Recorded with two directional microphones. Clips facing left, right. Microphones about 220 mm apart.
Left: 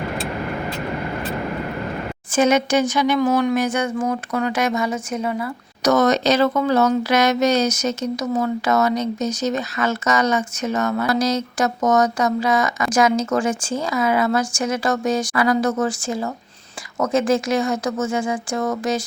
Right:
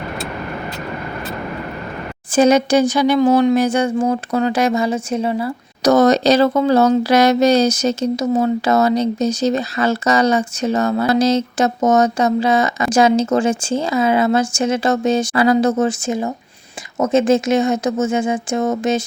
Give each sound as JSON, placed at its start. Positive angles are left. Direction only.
{"t": 2.3, "sound": "speech", "side_deg": -35}